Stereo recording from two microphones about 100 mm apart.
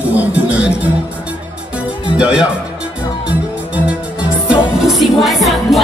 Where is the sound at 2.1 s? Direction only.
10° right (ahead or behind).